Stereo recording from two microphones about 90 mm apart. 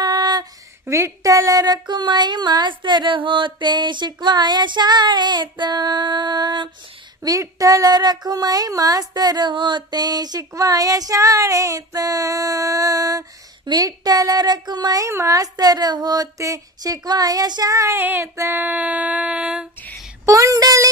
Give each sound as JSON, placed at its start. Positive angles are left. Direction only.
{"t": 0.0, "sound": "female singing", "side_deg": -50}
{"t": 0.8, "sound": "speech", "side_deg": -30}
{"t": 7.2, "sound": "speech", "side_deg": -40}
{"t": 15.0, "sound": "speech", "side_deg": -35}
{"t": 18.0, "sound": "child singing", "side_deg": -25}
{"t": 20.2, "sound": "speech", "side_deg": -35}